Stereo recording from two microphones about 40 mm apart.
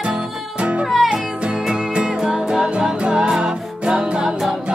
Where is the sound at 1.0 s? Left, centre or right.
Centre.